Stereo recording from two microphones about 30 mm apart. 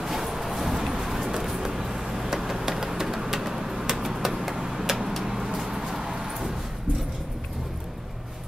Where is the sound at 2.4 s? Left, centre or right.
Centre.